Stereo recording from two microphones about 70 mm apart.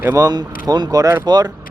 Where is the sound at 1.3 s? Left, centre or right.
Right.